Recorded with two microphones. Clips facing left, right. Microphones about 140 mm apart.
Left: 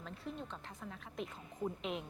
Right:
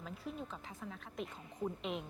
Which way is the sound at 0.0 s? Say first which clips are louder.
Right 1 dB; 5° right (ahead or behind).